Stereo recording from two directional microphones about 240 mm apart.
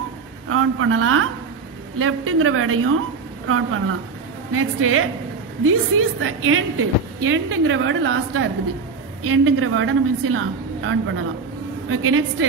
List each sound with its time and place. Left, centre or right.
0.5 s a woman's voice: right